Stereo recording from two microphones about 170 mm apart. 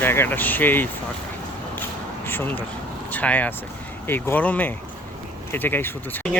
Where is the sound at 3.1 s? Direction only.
10° left (ahead or behind).